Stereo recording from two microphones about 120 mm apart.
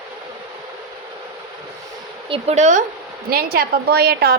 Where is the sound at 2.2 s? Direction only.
50° right (ahead or behind).